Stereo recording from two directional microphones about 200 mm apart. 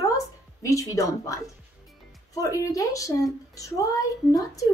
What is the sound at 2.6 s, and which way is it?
A woman's voice, 15° left (ahead or behind).